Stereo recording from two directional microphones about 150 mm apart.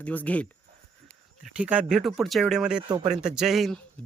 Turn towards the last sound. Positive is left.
turn(degrees=0)  # may be behind; listen again after turning